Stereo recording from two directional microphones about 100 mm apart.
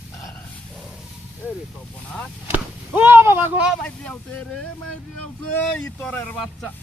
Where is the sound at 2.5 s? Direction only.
20° right (ahead or behind).